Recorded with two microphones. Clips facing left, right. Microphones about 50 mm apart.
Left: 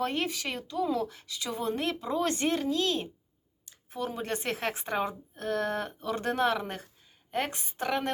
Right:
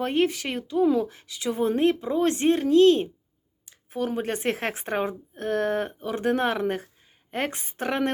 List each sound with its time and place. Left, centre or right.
0.0 s a woman's voice: right
6.0 s a woman's voice: centre
6.3 s speech: right